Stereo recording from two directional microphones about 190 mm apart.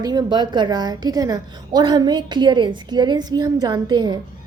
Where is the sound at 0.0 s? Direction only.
20° right (ahead or behind).